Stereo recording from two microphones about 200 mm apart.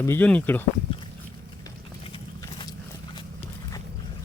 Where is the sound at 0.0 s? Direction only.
10° left (ahead or behind).